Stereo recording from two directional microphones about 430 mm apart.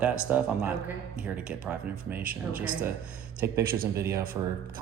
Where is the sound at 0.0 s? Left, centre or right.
Centre.